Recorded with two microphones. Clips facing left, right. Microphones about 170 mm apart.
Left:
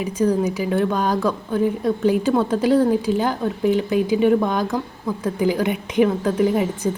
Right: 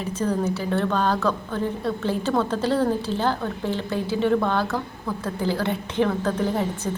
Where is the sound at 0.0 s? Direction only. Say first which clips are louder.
Left 5 dB; 10° left (ahead or behind).